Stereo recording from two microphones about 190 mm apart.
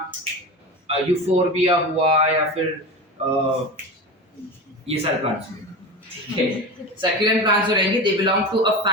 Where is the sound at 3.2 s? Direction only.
35° right (ahead or behind).